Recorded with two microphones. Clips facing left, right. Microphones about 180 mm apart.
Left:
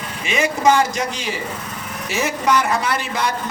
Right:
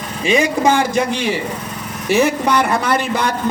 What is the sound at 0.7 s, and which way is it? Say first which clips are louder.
A man's voice: right 2 dB; 55° right (ahead or behind).